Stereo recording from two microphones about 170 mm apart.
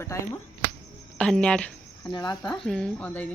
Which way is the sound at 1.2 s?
5° left (ahead or behind).